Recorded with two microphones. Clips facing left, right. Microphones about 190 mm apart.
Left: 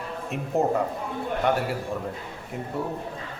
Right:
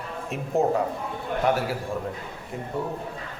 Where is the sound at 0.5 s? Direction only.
Centre (ahead or behind).